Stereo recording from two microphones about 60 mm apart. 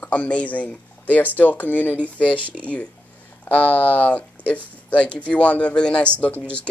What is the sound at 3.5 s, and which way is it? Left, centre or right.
Speech, left.